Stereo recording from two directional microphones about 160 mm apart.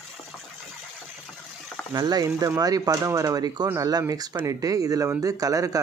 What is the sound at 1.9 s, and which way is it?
Speech, 25° right (ahead or behind).